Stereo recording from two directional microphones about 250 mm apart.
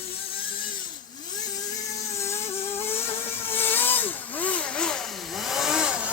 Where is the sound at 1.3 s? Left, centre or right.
Centre.